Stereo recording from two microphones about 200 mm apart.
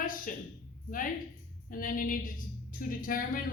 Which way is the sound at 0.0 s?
45° left (ahead or behind).